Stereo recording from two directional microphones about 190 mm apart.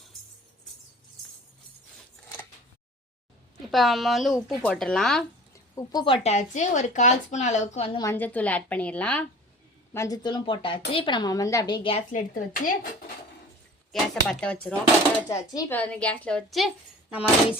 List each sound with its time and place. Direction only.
3.7 s speech: centre (ahead or behind)
5.5 s speech: 20° left (ahead or behind)
6.2 s a woman's voice: 40° left (ahead or behind)
7.9 s a woman's voice: 15° left (ahead or behind)
12.1 s speech: 45° left (ahead or behind)
13.9 s speech: centre (ahead or behind)
15.3 s a woman's voice: 15° left (ahead or behind); by 16.7 s centre (ahead or behind)